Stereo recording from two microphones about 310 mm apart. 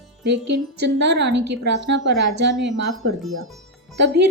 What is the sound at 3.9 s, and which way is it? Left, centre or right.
Speech, right.